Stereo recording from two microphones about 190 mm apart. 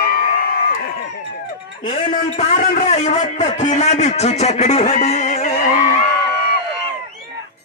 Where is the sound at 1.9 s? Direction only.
40° left (ahead or behind).